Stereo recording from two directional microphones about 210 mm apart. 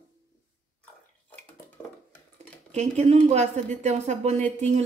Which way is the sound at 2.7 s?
30° right (ahead or behind).